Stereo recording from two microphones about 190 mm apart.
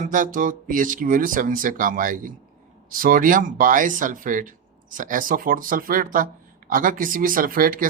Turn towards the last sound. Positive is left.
turn(degrees=-50)  # may be behind; listen again after turning